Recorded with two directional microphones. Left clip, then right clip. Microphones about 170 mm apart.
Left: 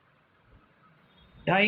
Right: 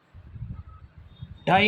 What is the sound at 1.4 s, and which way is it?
Speech, 65° right (ahead or behind).